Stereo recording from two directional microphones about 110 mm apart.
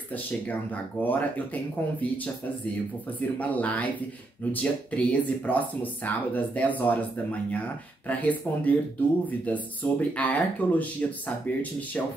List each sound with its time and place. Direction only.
0.1 s speech: 15° left (ahead or behind)
3.2 s speech: 15° left (ahead or behind)
8.1 s speech: 15° left (ahead or behind)